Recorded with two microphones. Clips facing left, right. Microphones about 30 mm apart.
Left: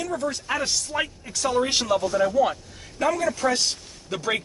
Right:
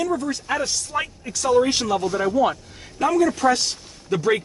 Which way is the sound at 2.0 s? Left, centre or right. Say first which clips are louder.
Even; centre.